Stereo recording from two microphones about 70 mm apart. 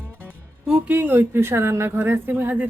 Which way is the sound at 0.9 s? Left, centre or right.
Right.